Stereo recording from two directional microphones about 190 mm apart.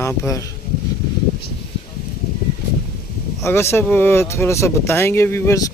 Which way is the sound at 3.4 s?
15° left (ahead or behind).